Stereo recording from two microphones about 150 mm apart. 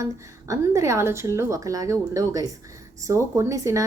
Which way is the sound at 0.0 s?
20° right (ahead or behind).